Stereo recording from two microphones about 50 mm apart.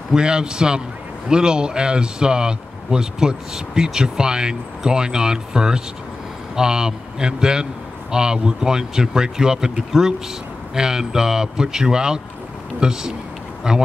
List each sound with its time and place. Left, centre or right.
0.1 s speech: centre